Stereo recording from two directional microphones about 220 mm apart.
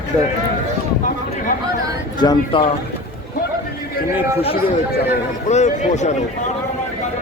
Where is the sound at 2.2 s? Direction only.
20° left (ahead or behind).